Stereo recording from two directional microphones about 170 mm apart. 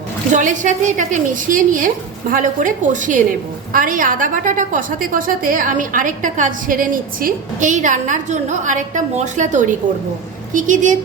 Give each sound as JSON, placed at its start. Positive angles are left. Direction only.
{"t": 0.3, "sound": "a woman's voice", "side_deg": -50}